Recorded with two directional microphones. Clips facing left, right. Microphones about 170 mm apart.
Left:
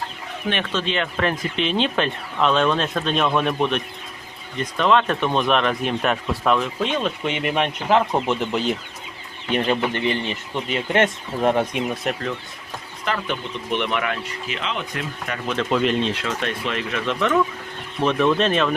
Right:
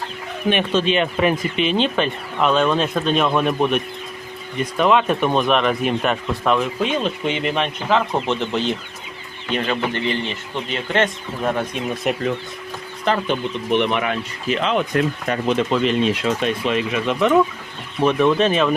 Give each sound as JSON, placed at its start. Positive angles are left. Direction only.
{"t": 0.5, "sound": "speech", "side_deg": -15}
{"t": 7.5, "sound": "speech", "side_deg": 15}
{"t": 12.1, "sound": "speech", "side_deg": -5}
{"t": 13.1, "sound": "speech", "side_deg": -20}
{"t": 14.4, "sound": "speech", "side_deg": -40}
{"t": 15.3, "sound": "speech", "side_deg": -35}
{"t": 15.7, "sound": "speech", "side_deg": 0}
{"t": 16.2, "sound": "speech", "side_deg": -15}